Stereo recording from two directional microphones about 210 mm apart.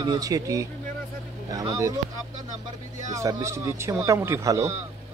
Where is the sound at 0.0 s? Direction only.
15° right (ahead or behind).